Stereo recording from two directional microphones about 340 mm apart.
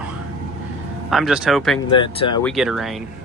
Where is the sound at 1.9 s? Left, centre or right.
Centre.